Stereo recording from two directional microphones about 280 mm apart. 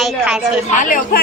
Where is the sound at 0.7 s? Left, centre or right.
Left.